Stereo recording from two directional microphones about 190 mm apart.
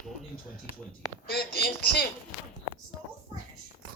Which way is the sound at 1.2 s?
60° left (ahead or behind).